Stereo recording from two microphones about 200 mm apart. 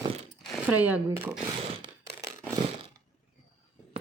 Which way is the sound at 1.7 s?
20° right (ahead or behind).